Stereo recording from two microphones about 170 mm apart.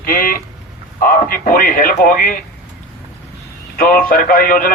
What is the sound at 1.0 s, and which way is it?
Speech, 55° left (ahead or behind).